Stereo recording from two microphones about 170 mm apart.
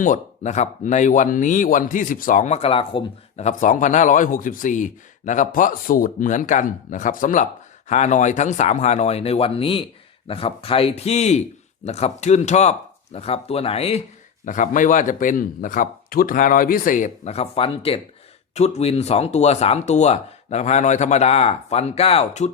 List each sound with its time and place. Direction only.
0.0 s speech: 45° left (ahead or behind)
14.4 s speech: 50° left (ahead or behind)